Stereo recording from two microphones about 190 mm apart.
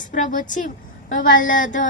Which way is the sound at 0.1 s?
45° left (ahead or behind).